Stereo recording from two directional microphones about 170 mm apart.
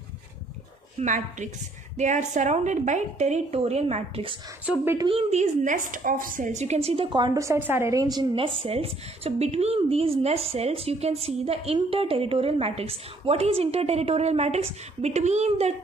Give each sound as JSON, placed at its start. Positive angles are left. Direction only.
{"t": 0.9, "sound": "a woman's voice", "side_deg": -45}
{"t": 4.6, "sound": "a woman's voice", "side_deg": -15}
{"t": 5.0, "sound": "a woman's voice", "side_deg": -40}